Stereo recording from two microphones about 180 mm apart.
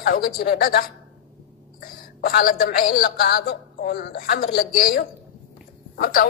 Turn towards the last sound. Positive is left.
turn(degrees=55)  # may be behind; listen again after turning